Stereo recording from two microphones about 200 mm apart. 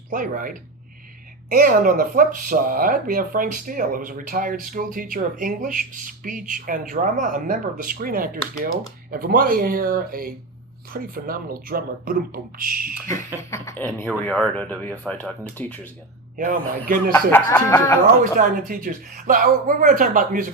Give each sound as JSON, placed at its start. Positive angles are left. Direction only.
{"t": 0.1, "sound": "speech", "side_deg": -45}
{"t": 13.3, "sound": "speech", "side_deg": 15}
{"t": 16.4, "sound": "speech", "side_deg": -45}
{"t": 17.3, "sound": "speech", "side_deg": 15}
{"t": 18.2, "sound": "speech", "side_deg": -45}